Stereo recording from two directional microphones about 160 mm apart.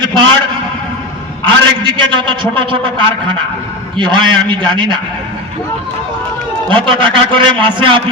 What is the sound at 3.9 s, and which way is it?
A man's voice, 30° right (ahead or behind).